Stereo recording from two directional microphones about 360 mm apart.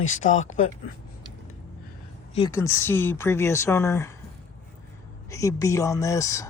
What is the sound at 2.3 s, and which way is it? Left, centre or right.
Speech, centre.